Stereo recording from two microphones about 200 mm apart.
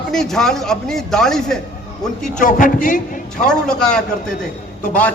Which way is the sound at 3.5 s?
5° left (ahead or behind).